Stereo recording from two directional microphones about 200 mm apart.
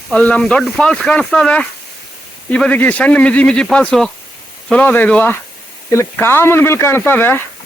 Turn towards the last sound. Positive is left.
turn(degrees=10)  # may be behind; listen again after turning